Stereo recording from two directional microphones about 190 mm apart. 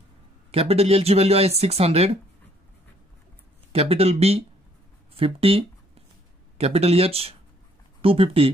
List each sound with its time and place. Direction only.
0.5 s speech: 30° right (ahead or behind)
3.7 s speech: 30° right (ahead or behind)